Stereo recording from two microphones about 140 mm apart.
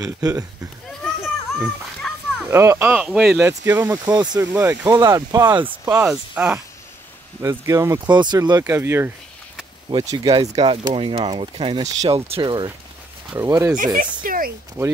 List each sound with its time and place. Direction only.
0.0 s speech: 25° right (ahead or behind)
0.8 s a sound: centre (ahead or behind)
2.4 s speech: 20° right (ahead or behind)
2.9 s speech: 5° right (ahead or behind)
3.4 s speech: 15° right (ahead or behind)
3.9 s speech: 30° right (ahead or behind)
4.4 s speech: 20° right (ahead or behind)
5.7 s speech: 15° right (ahead or behind)
7.4 s speech: 20° right (ahead or behind)
8.0 s speech: 30° right (ahead or behind)
9.8 s speech: 30° right (ahead or behind)
13.4 s speech: 20° right (ahead or behind)
14.2 s a sound: 90° right
14.8 s speech: 15° right (ahead or behind)